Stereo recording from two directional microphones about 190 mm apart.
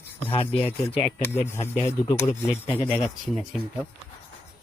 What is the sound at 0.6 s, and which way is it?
Speech, 30° left (ahead or behind).